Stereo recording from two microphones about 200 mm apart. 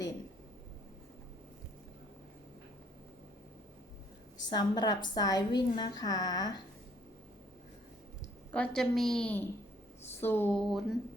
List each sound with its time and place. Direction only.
4.4 s speech: 20° left (ahead or behind)
8.5 s a woman's voice: 5° left (ahead or behind)